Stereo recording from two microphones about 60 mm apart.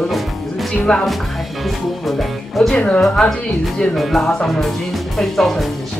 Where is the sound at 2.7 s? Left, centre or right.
Centre.